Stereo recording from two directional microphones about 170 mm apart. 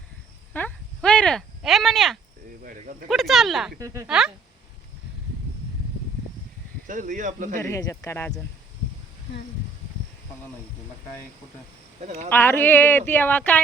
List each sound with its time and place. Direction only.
0.5 s a sound: 10° left (ahead or behind)
2.6 s speech: 55° right (ahead or behind)
3.1 s speech: centre (ahead or behind)
3.8 s speech: 20° right (ahead or behind)
6.8 s speech: 50° right (ahead or behind)
7.6 s speech: 15° left (ahead or behind)
12.0 s speech: 45° right (ahead or behind)
12.3 s speech: 10° left (ahead or behind)